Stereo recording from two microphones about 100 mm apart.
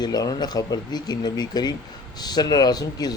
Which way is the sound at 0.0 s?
40° left (ahead or behind).